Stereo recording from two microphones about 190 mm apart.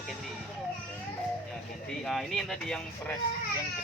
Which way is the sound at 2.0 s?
Centre (ahead or behind).